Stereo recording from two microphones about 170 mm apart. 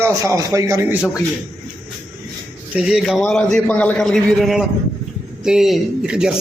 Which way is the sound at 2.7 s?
Centre (ahead or behind).